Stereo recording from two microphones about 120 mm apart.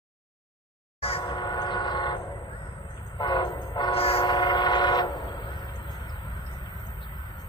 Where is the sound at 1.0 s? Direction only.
55° left (ahead or behind).